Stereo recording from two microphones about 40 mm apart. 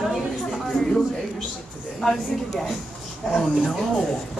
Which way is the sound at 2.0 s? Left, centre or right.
Centre.